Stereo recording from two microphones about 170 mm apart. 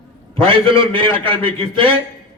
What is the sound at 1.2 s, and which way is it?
Speech, 30° right (ahead or behind).